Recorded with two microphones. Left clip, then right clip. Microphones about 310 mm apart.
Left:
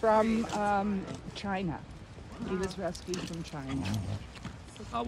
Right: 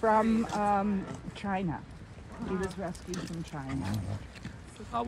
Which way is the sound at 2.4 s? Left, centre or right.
Centre.